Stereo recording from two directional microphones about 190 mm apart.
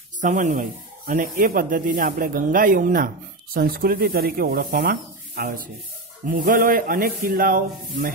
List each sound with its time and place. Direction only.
0.2 s speech: 40° right (ahead or behind)